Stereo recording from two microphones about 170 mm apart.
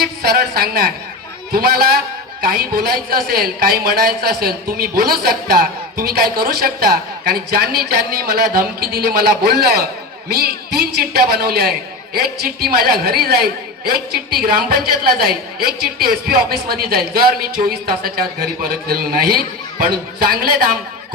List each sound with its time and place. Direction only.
0.0 s a woman's voice: 65° right (ahead or behind)